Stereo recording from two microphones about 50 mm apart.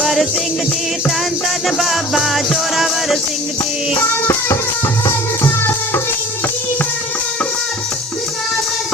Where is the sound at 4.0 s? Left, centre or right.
Left.